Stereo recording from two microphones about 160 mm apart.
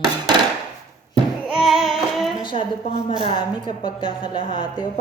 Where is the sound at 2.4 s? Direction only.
30° left (ahead or behind).